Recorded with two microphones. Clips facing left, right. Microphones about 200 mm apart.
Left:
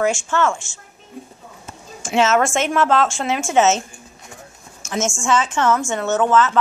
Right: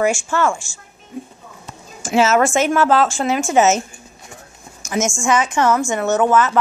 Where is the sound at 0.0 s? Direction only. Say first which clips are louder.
Right 1 dB; 10° right (ahead or behind).